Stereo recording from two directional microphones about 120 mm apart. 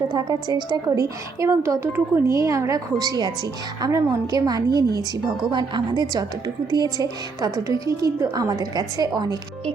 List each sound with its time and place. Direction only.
0.1 s a woman's voice: 35° right (ahead or behind)